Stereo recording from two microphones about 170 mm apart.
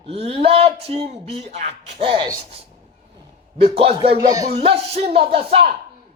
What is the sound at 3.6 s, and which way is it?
Speech, 35° right (ahead or behind).